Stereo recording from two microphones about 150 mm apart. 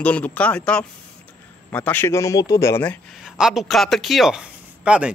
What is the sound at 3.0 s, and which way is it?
Speech, centre (ahead or behind).